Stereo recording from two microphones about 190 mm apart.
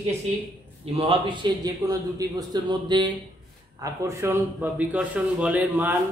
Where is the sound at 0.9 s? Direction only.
30° right (ahead or behind); by 5.9 s 10° right (ahead or behind).